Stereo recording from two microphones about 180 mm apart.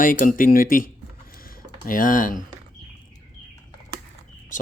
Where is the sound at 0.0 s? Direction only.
50° left (ahead or behind).